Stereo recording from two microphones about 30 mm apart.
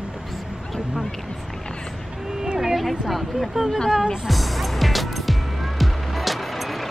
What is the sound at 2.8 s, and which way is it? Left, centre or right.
Speech, centre.